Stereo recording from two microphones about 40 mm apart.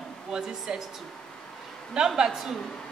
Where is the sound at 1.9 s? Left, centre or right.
Centre.